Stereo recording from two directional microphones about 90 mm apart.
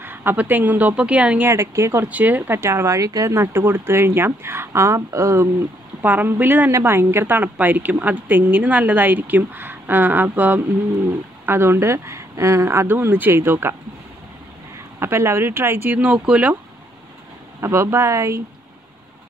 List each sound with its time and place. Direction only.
0.0 s a woman's voice: 25° right (ahead or behind)
1.5 s speech: 30° right (ahead or behind)
2.0 s a woman's voice: 20° right (ahead or behind)
6.0 s a woman's voice: 20° right (ahead or behind)
15.0 s a woman's voice: 30° right (ahead or behind)
17.6 s speech: 30° right (ahead or behind)